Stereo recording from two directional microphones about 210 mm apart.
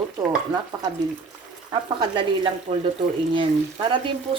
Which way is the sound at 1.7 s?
20° right (ahead or behind).